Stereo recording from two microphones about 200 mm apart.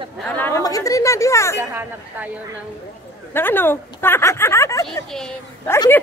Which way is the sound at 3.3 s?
10° left (ahead or behind).